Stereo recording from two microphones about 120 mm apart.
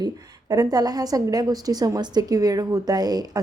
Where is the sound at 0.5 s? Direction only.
30° right (ahead or behind).